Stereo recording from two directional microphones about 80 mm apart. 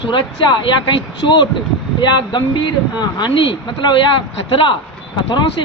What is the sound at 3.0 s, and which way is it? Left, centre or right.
Speech, left.